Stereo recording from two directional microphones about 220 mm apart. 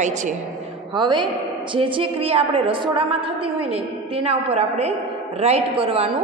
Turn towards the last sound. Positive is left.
turn(degrees=-30)  # may be behind; listen again after turning